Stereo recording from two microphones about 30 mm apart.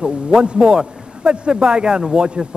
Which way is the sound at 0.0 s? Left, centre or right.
Right.